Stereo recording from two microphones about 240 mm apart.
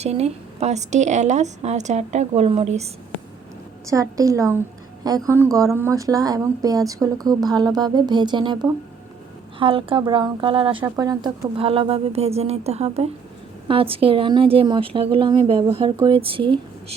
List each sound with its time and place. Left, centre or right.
0.0 s speech: right
3.8 s speech: centre
9.6 s speech: right